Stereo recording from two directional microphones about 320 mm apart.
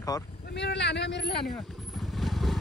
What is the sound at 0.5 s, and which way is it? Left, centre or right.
Speech, left.